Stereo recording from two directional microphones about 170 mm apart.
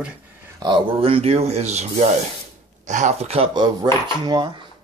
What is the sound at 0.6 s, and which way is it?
Speech, 30° right (ahead or behind).